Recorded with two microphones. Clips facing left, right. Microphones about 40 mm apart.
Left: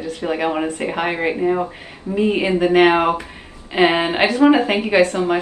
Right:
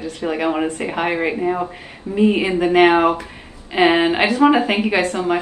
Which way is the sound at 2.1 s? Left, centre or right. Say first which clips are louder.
Left 1 dB; right.